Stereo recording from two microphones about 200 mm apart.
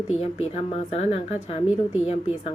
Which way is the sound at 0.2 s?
30° left (ahead or behind).